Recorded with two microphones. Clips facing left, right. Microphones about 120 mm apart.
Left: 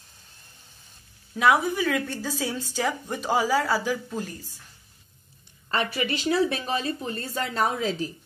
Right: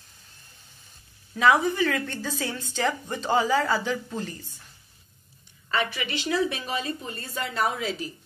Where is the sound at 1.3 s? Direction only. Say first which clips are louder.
Right 1 dB; 10° left (ahead or behind).